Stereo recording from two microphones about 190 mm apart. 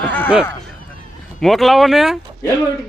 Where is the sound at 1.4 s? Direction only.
Centre (ahead or behind).